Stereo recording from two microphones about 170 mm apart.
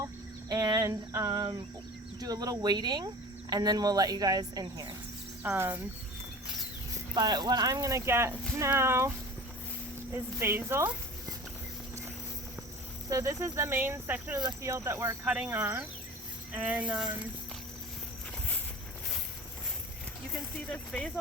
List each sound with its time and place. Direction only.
0.0 s a sound: 20° right (ahead or behind)
2.2 s speech: 20° right (ahead or behind)
6.9 s speech: 25° right (ahead or behind)
10.4 s speech: 15° right (ahead or behind)
13.1 s speech: 15° right (ahead or behind)
20.7 s speech: 5° left (ahead or behind)